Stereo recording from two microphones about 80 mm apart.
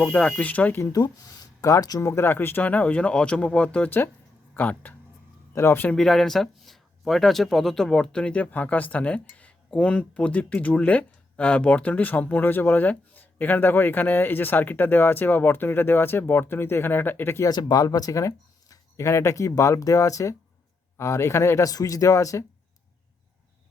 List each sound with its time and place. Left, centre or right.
0.0 s speech: centre
0.9 s speech: left
2.0 s speech: left
5.9 s speech: centre; by 17.4 s left
17.5 s speech: left